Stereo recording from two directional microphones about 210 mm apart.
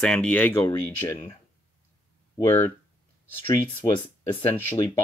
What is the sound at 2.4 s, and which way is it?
Speech, 10° left (ahead or behind).